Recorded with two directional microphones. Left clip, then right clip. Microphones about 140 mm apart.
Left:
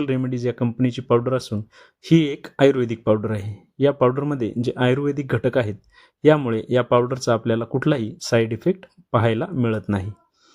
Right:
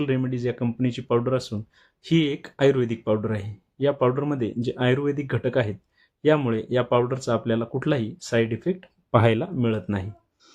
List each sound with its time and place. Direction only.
0.0 s speech: 50° left (ahead or behind)
9.1 s speech: centre (ahead or behind)
9.5 s speech: 45° left (ahead or behind)